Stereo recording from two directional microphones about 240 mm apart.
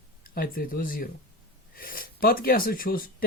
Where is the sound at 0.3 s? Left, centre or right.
Left.